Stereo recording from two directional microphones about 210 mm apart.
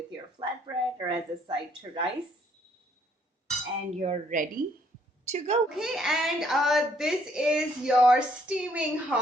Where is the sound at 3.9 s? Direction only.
35° right (ahead or behind).